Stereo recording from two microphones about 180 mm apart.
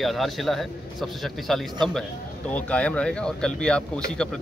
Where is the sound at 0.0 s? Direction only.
Centre (ahead or behind).